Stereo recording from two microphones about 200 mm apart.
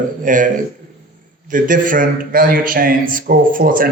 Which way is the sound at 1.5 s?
40° right (ahead or behind).